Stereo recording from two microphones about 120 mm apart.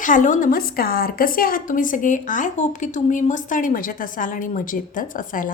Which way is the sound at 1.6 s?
90° left.